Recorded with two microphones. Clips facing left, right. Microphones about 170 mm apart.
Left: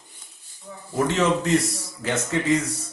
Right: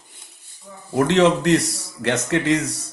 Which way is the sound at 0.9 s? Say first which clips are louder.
Right 5 dB; 70° right (ahead or behind).